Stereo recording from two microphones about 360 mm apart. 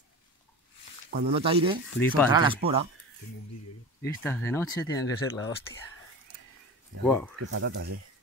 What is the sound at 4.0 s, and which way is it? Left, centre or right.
Speech, centre.